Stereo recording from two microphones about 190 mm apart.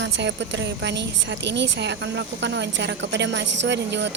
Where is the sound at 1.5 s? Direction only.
65° right (ahead or behind).